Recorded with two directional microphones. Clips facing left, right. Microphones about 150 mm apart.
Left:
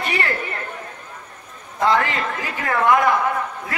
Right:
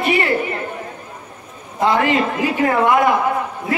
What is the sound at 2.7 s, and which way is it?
Speech, 25° right (ahead or behind).